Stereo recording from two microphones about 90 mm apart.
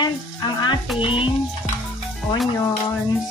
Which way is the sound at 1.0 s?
75° left (ahead or behind).